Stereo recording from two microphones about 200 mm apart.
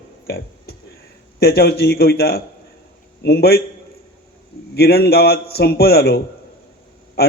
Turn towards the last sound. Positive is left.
turn(degrees=50)  # may be behind; listen again after turning